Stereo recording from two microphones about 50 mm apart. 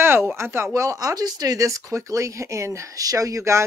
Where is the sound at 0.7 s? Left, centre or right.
Right.